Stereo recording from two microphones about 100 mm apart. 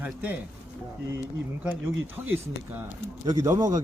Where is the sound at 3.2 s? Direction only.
35° right (ahead or behind).